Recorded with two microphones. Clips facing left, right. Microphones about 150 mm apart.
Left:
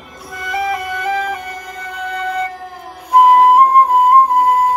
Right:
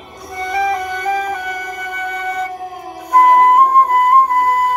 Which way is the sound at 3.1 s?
10° left (ahead or behind).